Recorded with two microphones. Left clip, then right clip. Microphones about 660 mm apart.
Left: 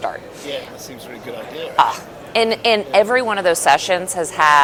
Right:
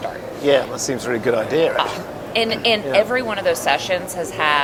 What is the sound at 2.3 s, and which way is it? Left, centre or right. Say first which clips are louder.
A woman's voice: left 3 dB; left.